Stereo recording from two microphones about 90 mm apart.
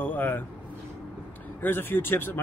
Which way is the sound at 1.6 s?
25° left (ahead or behind).